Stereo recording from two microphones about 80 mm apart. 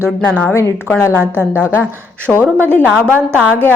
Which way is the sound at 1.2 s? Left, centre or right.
Right.